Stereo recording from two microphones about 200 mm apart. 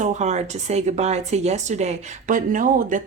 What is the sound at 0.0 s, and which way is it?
Speech, 35° right (ahead or behind).